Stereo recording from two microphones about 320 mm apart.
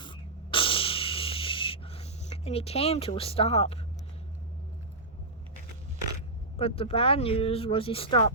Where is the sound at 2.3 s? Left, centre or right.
Centre.